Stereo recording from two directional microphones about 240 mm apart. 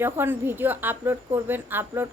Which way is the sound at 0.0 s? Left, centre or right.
Centre.